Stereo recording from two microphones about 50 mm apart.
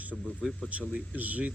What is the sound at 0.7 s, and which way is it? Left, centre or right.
Speech, right.